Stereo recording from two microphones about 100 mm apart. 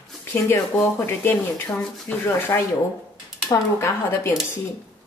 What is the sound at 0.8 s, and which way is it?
Speech, 25° left (ahead or behind).